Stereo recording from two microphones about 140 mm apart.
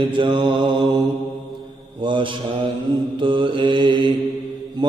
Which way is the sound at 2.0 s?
35° right (ahead or behind).